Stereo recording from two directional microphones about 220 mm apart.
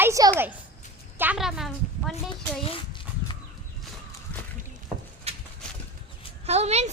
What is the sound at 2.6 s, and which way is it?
Dog, 25° left (ahead or behind).